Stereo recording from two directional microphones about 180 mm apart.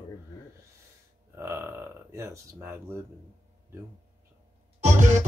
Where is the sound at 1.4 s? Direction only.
15° right (ahead or behind).